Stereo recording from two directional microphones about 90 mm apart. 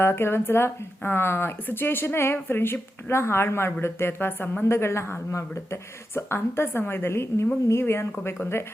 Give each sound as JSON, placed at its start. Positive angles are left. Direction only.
{"t": 0.0, "sound": "speech", "side_deg": 25}